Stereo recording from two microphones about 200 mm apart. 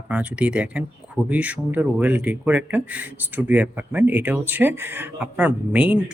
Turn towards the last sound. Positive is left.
turn(degrees=-5)  # may be behind; listen again after turning